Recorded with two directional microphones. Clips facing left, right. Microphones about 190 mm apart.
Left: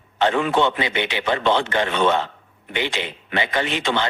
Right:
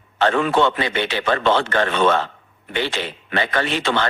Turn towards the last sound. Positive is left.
turn(degrees=15)  # may be behind; listen again after turning